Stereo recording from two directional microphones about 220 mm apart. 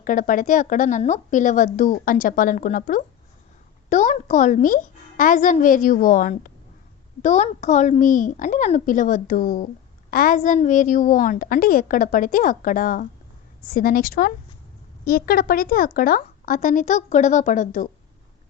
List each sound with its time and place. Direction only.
0.0 s a woman's voice: 35° left (ahead or behind)